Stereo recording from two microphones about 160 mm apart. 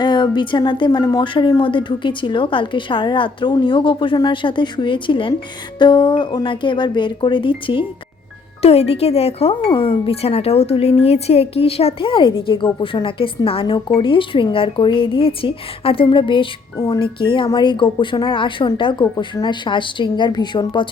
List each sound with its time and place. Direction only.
0.0 s speech: 30° left (ahead or behind)